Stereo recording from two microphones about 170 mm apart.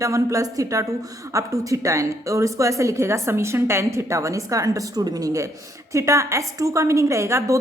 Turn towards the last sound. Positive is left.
turn(degrees=-15)  # may be behind; listen again after turning